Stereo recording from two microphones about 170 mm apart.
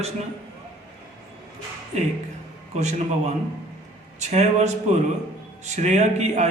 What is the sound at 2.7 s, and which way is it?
A man's voice, 40° right (ahead or behind).